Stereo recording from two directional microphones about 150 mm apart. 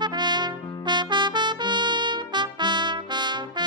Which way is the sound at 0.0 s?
30° right (ahead or behind).